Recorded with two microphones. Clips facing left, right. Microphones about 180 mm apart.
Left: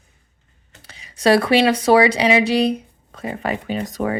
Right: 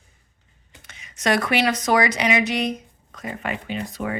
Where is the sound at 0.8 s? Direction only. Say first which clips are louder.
Left 7 dB; 35° left (ahead or behind).